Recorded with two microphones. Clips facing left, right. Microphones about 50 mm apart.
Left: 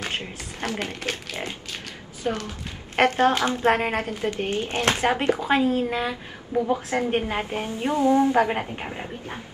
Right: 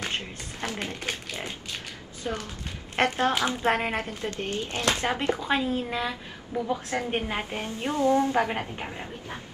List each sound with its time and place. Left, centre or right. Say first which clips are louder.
0.6 s speech: left 4 dB; centre
2.3 s a woman's voice: left 5 dB; left
4.1 s speech: left 5 dB; left
5.1 s a woman's voice: left 4 dB; centre